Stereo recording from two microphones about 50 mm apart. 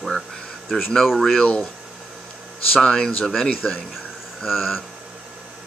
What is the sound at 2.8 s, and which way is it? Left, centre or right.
Speech, centre.